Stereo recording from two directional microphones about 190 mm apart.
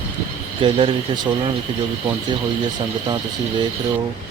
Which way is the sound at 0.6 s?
25° right (ahead or behind).